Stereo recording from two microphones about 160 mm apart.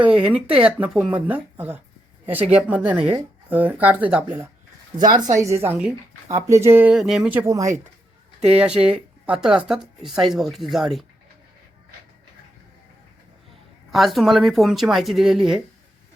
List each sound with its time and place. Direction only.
0.3 s speech: 10° right (ahead or behind)
5.1 s a woman's voice: 25° right (ahead or behind)
8.4 s speech: 5° right (ahead or behind)
13.9 s speech: centre (ahead or behind)